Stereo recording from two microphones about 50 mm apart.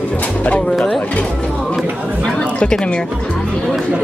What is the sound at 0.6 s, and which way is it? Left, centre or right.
Speech, centre.